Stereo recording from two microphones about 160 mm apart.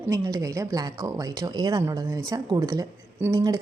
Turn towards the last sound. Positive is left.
turn(degrees=-20)  # may be behind; listen again after turning